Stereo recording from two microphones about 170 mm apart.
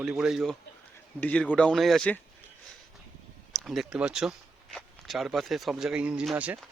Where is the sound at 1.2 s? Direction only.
10° left (ahead or behind).